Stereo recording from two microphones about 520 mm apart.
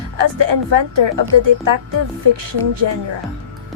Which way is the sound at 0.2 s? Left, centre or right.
Right.